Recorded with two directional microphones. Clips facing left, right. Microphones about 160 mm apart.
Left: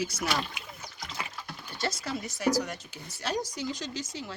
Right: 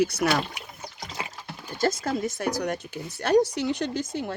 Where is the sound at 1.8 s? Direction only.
50° right (ahead or behind).